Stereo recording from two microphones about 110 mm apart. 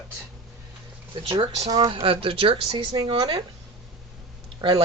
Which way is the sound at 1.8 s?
55° right (ahead or behind).